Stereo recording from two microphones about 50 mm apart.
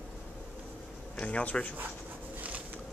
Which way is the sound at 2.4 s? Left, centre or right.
Right.